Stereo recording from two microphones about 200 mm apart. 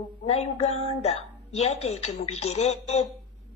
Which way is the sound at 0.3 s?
30° left (ahead or behind).